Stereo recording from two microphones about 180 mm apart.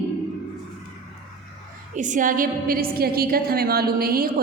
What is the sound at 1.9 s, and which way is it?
A woman's voice, 45° right (ahead or behind).